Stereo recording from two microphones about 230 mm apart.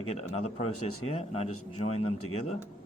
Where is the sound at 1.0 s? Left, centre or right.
Left.